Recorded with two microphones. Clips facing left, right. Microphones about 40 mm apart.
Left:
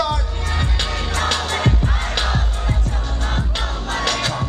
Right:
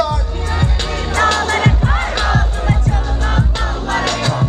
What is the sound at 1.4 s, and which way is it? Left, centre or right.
Music, right.